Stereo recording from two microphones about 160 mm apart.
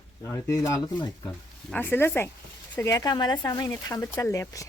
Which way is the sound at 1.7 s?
15° left (ahead or behind).